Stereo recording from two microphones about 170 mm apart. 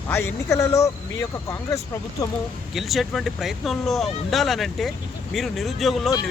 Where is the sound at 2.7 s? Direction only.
Centre (ahead or behind).